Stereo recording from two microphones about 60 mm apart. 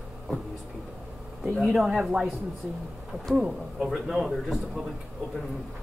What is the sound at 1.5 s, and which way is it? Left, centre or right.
Speech, centre.